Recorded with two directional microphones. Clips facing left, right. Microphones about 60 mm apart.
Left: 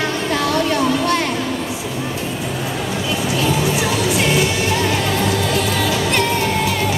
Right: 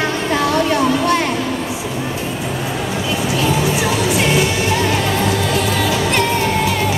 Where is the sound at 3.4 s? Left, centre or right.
Centre.